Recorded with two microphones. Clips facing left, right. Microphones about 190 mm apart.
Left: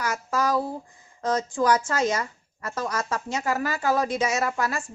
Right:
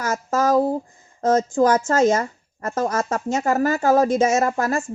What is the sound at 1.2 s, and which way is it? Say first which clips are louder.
Speech: right 7 dB; 45° right (ahead or behind).